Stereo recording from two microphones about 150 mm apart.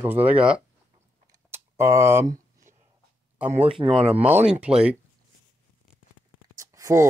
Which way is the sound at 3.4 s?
10° right (ahead or behind).